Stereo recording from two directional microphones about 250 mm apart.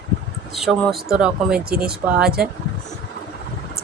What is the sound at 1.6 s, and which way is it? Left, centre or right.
Speech, right.